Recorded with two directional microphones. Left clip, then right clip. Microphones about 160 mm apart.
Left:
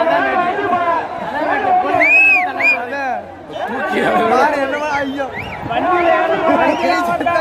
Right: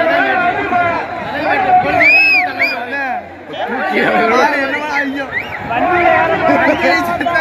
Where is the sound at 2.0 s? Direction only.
30° left (ahead or behind).